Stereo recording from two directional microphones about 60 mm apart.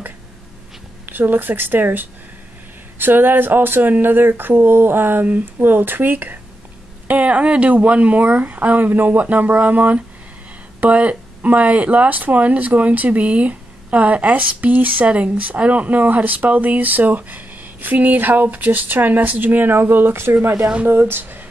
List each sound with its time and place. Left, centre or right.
1.0 s speech: right
20.6 s speech: centre
20.9 s speech: right